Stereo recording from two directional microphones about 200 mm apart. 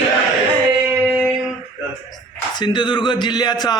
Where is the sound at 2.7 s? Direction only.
25° left (ahead or behind).